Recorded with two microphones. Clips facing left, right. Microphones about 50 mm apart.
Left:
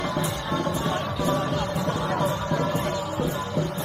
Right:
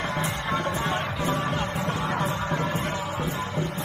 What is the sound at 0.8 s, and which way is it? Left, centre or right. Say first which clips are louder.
Music: left 1 dB; right.